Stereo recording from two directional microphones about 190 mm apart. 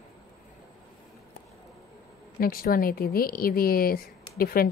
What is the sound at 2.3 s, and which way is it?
A woman's voice, 50° left (ahead or behind).